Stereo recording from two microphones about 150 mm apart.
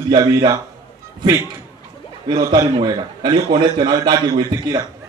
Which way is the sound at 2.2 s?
30° right (ahead or behind).